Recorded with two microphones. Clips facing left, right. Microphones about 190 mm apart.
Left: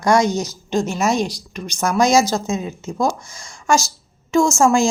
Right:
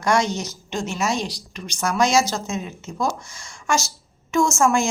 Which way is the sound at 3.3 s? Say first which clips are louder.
Left 5 dB; 35° left (ahead or behind).